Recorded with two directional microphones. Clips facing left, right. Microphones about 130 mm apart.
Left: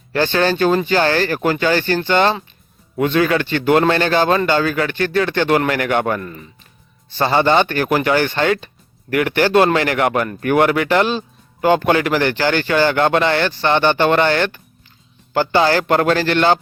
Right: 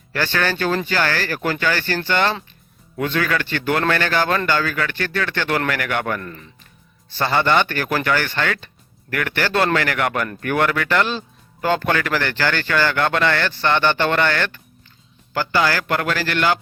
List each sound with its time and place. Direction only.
0.1 s speech: 25° left (ahead or behind)
6.2 s speech: 10° left (ahead or behind); by 16.6 s 25° left (ahead or behind)